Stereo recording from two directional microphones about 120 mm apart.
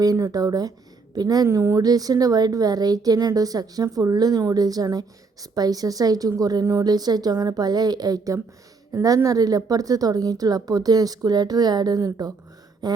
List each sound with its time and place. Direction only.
0.0 s a woman's voice: 30° right (ahead or behind)